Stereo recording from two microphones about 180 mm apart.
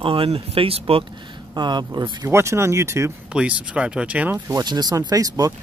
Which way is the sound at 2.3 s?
15° right (ahead or behind).